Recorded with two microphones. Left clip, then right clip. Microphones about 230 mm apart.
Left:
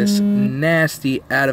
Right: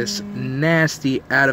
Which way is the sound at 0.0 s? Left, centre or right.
Centre.